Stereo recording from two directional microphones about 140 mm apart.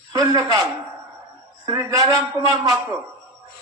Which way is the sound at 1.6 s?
25° right (ahead or behind).